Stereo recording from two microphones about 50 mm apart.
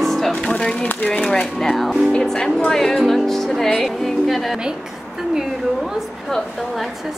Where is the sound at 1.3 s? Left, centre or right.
Centre.